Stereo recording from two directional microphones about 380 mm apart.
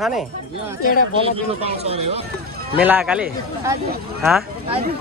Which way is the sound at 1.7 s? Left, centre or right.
Centre.